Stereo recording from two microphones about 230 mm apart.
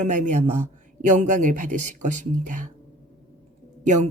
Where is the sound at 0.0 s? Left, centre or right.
Right.